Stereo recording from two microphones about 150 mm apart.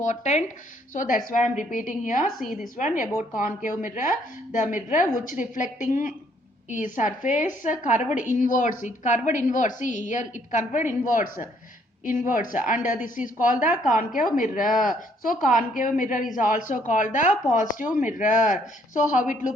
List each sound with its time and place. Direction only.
0.0 s a woman's voice: 50° left (ahead or behind)
2.4 s a woman's voice: centre (ahead or behind)
2.7 s a woman's voice: 60° left (ahead or behind)